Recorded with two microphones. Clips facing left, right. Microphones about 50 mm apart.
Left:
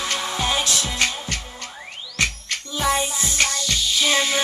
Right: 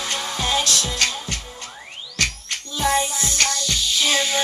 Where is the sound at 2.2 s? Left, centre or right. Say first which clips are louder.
Left 1 dB; centre.